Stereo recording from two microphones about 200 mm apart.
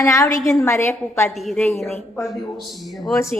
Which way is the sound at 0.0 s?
15° left (ahead or behind).